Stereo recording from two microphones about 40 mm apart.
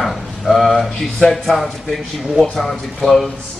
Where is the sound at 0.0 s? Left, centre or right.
Centre.